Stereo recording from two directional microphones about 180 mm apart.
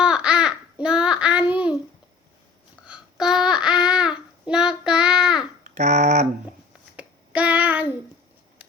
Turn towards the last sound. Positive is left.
turn(degrees=-10)  # may be behind; listen again after turning